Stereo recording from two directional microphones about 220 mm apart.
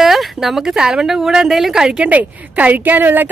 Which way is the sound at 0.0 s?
Centre (ahead or behind).